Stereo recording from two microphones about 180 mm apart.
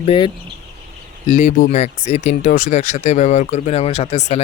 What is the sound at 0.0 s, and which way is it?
Speech, 30° left (ahead or behind).